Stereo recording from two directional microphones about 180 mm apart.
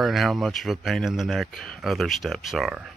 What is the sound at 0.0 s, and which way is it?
Speech, centre (ahead or behind).